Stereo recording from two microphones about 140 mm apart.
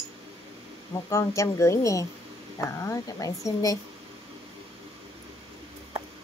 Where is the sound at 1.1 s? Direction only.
20° left (ahead or behind).